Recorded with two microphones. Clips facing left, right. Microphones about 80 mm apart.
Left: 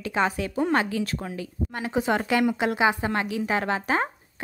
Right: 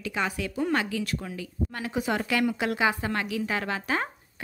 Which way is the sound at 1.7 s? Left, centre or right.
Left.